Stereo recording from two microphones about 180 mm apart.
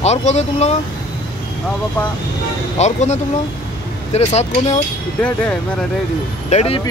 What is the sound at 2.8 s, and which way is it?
Speech, 40° left (ahead or behind).